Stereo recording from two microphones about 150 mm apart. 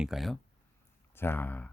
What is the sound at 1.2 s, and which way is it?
Speech, 15° left (ahead or behind).